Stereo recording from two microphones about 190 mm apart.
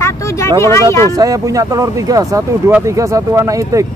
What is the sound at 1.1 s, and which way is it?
Speech, 20° right (ahead or behind).